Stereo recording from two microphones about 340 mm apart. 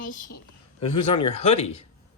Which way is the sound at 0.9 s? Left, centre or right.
Left.